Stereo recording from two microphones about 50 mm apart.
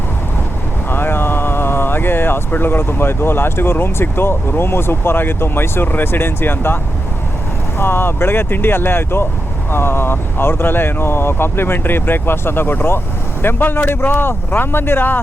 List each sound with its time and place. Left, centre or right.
0.9 s speech: left
7.8 s speech: left